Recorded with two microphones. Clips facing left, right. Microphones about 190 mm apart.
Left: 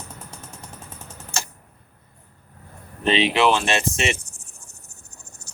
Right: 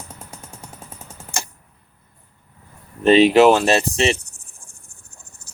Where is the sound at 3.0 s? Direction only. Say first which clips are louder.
Right 8 dB; 45° right (ahead or behind).